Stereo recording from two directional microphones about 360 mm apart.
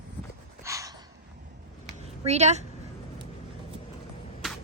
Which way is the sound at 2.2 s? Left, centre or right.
Centre.